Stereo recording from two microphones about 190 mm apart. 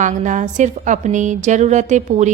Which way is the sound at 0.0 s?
40° right (ahead or behind).